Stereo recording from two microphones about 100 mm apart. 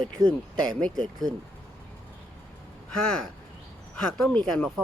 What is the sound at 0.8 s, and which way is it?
Speech, 10° left (ahead or behind).